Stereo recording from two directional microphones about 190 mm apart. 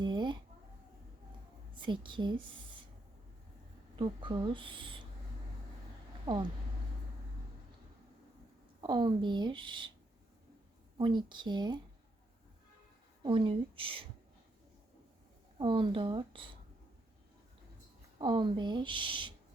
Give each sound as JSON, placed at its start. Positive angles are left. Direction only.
{"t": 0.0, "sound": "a sound", "side_deg": -25}
{"t": 1.8, "sound": "speech", "side_deg": -25}
{"t": 3.9, "sound": "speech", "side_deg": -25}
{"t": 6.2, "sound": "speech", "side_deg": -20}
{"t": 8.8, "sound": "speech", "side_deg": -25}
{"t": 10.9, "sound": "speech", "side_deg": -25}
{"t": 13.2, "sound": "speech", "side_deg": -25}
{"t": 15.5, "sound": "speech", "side_deg": -25}
{"t": 18.2, "sound": "speech", "side_deg": -25}